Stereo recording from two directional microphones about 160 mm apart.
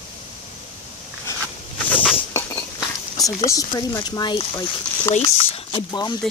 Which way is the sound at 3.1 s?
20° left (ahead or behind).